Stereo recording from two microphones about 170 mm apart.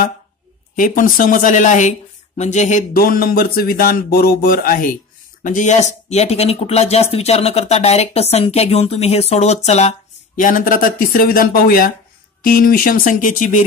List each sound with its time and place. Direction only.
0.7 s speech: 55° left (ahead or behind)
3.0 s speech: 60° left (ahead or behind)
5.4 s speech: 45° left (ahead or behind)